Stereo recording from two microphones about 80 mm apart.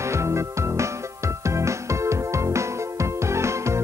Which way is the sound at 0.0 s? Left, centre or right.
Right.